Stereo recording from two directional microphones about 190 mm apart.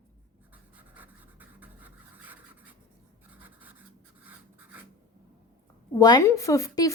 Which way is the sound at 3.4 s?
10° right (ahead or behind).